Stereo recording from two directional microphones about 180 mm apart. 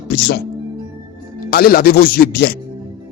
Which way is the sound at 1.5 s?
55° left (ahead or behind).